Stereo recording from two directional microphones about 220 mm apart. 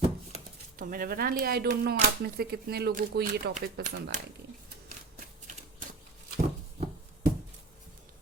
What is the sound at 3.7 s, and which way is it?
Speech, 35° right (ahead or behind).